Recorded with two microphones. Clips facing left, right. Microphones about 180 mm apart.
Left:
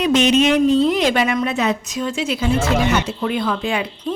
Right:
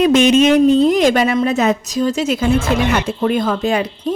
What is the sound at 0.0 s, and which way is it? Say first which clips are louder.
A woman's voice: right 4 dB; 50° right (ahead or behind).